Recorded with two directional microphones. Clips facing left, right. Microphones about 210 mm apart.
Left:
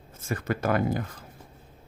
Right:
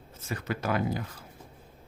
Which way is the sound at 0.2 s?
50° left (ahead or behind).